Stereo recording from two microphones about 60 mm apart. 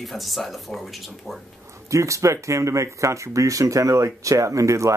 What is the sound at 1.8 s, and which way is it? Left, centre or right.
Speech, right.